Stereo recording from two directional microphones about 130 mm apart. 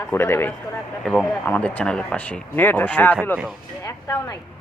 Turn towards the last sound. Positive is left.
turn(degrees=25)  # may be behind; listen again after turning